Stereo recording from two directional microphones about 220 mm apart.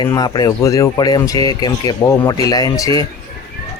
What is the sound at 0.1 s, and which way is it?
Speech, 15° left (ahead or behind).